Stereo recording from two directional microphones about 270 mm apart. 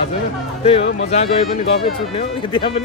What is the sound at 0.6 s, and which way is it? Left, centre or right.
Speech, left.